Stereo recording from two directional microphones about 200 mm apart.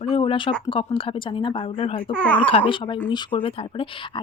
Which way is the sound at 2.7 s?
25° left (ahead or behind).